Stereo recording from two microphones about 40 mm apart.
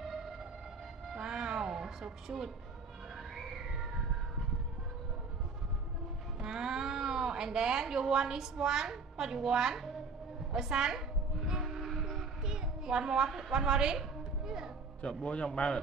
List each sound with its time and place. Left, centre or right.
1.1 s music: centre
6.4 s speech: centre
10.5 s a sound: centre
15.0 s a man's voice: left